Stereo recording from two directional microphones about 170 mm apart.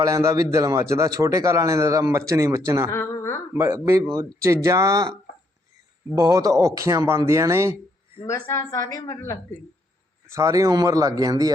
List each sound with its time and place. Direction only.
0.0 s speech: 20° right (ahead or behind)
2.9 s a woman's voice: 15° left (ahead or behind)
3.5 s speech: 15° right (ahead or behind)
6.1 s speech: 20° right (ahead or behind)
8.3 s a woman's voice: 15° left (ahead or behind)
10.2 s speech: 15° right (ahead or behind)